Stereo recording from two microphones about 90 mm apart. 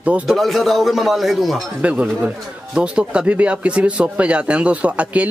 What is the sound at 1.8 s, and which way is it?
Speech, 15° right (ahead or behind).